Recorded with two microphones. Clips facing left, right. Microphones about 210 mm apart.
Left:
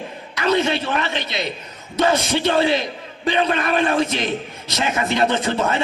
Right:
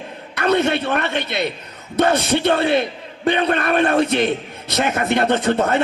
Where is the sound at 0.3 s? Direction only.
60° right (ahead or behind).